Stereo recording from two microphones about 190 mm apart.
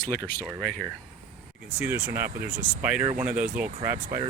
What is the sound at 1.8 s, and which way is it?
Speech, 10° right (ahead or behind).